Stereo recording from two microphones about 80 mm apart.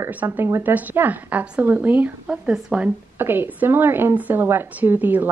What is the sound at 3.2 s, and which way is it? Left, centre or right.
A woman's voice, right.